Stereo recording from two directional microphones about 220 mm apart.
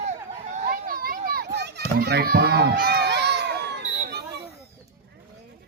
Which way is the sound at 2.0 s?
45° right (ahead or behind).